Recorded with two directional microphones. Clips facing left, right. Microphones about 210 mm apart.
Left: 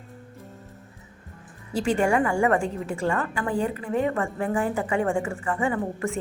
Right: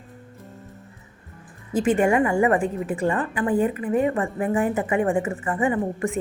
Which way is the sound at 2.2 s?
20° right (ahead or behind).